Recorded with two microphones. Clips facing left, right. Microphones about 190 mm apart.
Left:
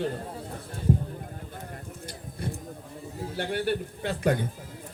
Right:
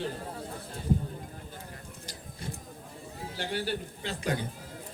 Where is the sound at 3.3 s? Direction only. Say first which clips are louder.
Left 5 dB; 55° left (ahead or behind).